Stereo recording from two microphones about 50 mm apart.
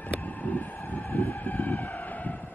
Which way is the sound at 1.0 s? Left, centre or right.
Left.